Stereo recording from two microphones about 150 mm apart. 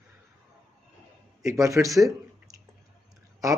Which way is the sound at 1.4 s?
20° right (ahead or behind).